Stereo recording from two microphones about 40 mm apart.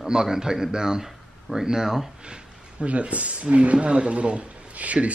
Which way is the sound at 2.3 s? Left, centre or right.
Right.